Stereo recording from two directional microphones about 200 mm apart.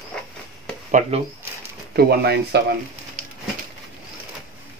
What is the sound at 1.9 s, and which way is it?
Speech, 50° right (ahead or behind).